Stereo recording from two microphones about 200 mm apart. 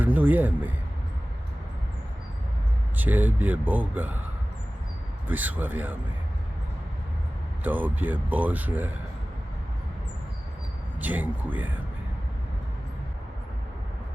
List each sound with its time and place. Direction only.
0.0 s speech: 10° right (ahead or behind)
3.0 s speech: 10° right (ahead or behind)
5.3 s speech: 10° right (ahead or behind)
7.6 s speech: 10° right (ahead or behind)
11.0 s speech: 10° right (ahead or behind)